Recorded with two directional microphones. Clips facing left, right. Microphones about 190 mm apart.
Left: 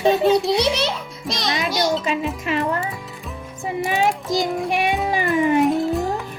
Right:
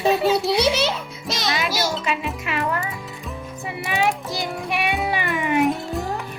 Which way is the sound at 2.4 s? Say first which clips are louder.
Left 4 dB; 40° left (ahead or behind).